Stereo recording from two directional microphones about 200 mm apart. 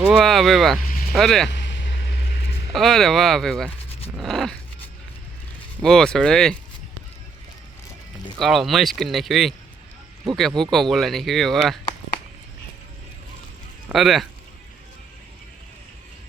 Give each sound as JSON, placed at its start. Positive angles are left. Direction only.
{"t": 0.0, "sound": "speech", "side_deg": 0}
{"t": 1.5, "sound": "vehicle", "side_deg": 60}
{"t": 2.7, "sound": "speech", "side_deg": 0}
{"t": 5.8, "sound": "speech", "side_deg": 5}
{"t": 8.4, "sound": "speech", "side_deg": 0}
{"t": 13.8, "sound": "speech", "side_deg": 0}